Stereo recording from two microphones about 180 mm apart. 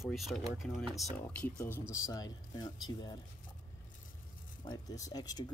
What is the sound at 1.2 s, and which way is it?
Speech, 10° left (ahead or behind).